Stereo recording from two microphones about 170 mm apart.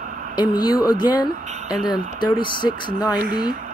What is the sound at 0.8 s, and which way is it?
Speech, 25° left (ahead or behind).